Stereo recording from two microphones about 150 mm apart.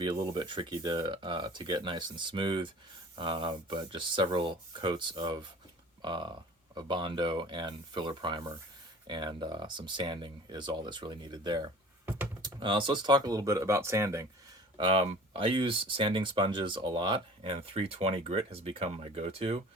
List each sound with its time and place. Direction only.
0.0 s speech: 30° right (ahead or behind)
14.8 s speech: 40° right (ahead or behind)